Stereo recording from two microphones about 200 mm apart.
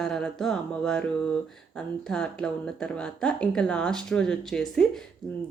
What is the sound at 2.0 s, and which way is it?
Speech, 5° left (ahead or behind).